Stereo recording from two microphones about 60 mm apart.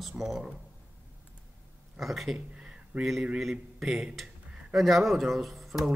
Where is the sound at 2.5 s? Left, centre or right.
Centre.